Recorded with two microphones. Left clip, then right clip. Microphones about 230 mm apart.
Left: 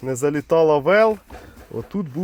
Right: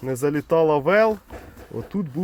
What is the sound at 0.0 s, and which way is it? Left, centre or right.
Speech, centre.